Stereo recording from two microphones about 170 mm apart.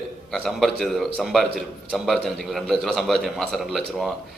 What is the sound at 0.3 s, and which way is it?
A man's voice, centre (ahead or behind).